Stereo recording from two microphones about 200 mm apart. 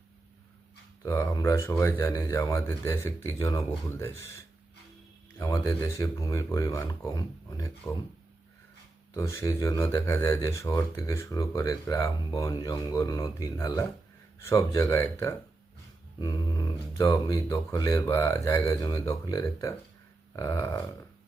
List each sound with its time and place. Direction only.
1.0 s speech: 15° left (ahead or behind)
5.4 s speech: 15° left (ahead or behind)
9.1 s speech: 15° left (ahead or behind)